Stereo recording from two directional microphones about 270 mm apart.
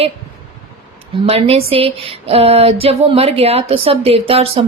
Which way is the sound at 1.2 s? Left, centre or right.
Right.